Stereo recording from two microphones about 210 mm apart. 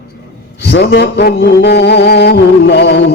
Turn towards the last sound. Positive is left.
turn(degrees=55)  # may be behind; listen again after turning